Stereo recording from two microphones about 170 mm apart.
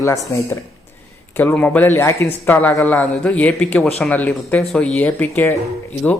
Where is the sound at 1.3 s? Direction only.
10° left (ahead or behind).